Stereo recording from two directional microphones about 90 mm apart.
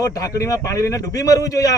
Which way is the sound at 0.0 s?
40° left (ahead or behind).